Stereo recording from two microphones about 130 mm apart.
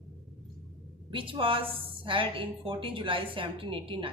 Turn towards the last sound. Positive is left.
turn(degrees=-40)  # may be behind; listen again after turning